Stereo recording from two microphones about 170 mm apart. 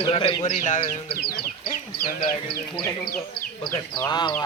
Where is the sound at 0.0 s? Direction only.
30° left (ahead or behind).